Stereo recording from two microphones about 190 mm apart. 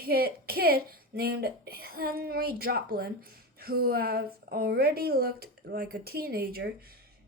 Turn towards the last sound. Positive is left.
turn(degrees=-55)  # may be behind; listen again after turning